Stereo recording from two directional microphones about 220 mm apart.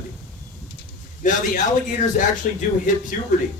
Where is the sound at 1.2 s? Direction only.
35° left (ahead or behind).